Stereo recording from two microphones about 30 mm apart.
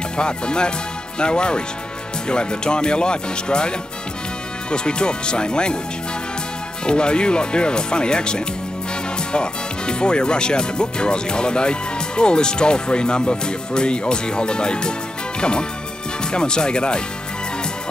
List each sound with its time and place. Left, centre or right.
0.2 s speech: left
6.9 s speech: left
16.3 s speech: left